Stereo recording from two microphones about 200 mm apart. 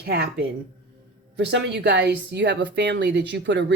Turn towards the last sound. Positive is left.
turn(degrees=-60)  # may be behind; listen again after turning